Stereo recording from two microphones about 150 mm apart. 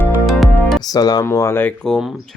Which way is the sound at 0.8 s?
25° left (ahead or behind).